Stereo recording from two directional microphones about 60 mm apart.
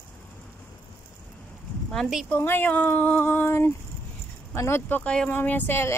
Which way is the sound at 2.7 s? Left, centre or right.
Left.